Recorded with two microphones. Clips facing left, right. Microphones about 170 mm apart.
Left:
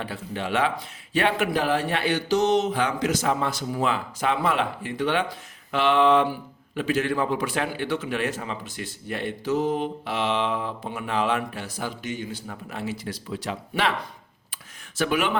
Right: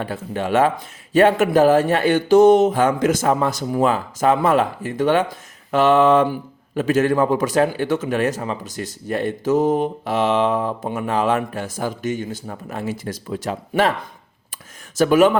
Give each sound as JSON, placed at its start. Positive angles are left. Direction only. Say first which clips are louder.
{"t": 0.0, "sound": "a man's voice", "louder": "right 6 dB", "side_deg": -45}
{"t": 14.9, "sound": "a man's voice", "louder": "right 10 dB", "side_deg": -45}